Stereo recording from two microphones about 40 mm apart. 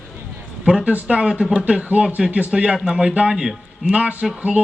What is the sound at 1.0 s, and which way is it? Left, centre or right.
A man's voice, right.